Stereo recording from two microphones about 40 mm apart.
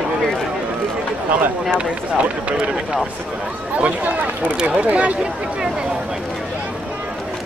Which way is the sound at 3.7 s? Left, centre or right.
Right.